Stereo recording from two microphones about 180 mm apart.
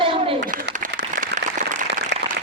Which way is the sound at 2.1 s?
75° right (ahead or behind).